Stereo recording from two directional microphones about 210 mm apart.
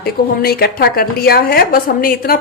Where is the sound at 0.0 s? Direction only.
50° left (ahead or behind).